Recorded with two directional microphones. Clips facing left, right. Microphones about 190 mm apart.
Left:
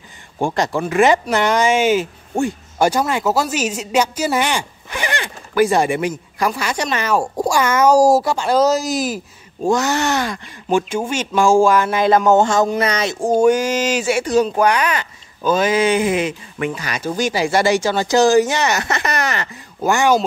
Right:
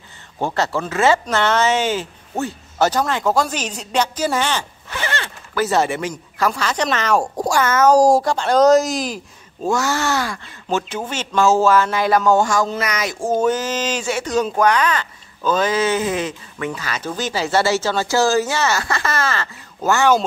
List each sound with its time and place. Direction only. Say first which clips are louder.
0.4 s speech: left 2 dB; 15° left (ahead or behind)
9.7 s speech: left 2 dB; 20° left (ahead or behind)
13.2 s speech: left 5 dB; 15° left (ahead or behind)